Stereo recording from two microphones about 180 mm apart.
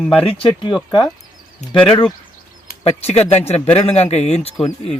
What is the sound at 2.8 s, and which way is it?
Speech, 35° left (ahead or behind).